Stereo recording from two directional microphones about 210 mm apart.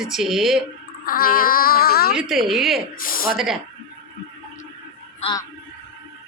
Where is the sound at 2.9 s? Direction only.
40° left (ahead or behind).